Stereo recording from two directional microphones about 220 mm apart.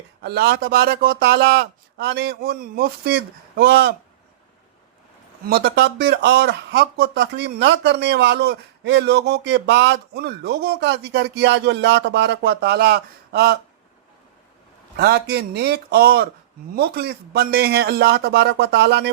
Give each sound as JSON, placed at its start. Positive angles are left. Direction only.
{"t": 0.2, "sound": "speech", "side_deg": -45}
{"t": 5.5, "sound": "speech", "side_deg": -45}
{"t": 14.9, "sound": "speech", "side_deg": -45}